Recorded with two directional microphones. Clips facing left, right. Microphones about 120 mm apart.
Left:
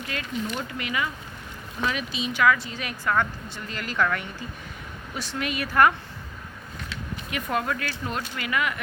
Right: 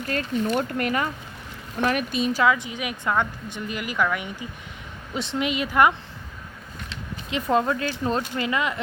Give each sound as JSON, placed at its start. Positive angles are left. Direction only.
{"t": 0.1, "sound": "speech", "side_deg": -45}
{"t": 2.4, "sound": "a woman's voice", "side_deg": -20}
{"t": 7.3, "sound": "speech", "side_deg": -25}